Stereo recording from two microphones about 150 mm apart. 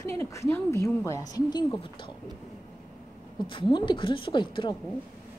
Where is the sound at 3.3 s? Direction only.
35° left (ahead or behind).